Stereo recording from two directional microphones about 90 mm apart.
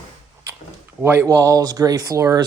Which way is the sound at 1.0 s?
25° right (ahead or behind).